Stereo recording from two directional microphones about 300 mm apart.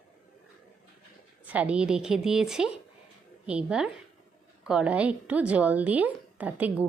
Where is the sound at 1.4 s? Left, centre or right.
Centre.